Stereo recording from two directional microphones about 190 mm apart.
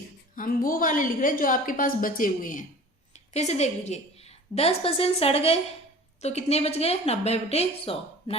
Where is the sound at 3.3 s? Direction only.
35° left (ahead or behind).